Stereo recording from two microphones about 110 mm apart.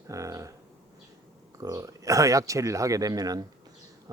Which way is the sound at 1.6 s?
30° right (ahead or behind).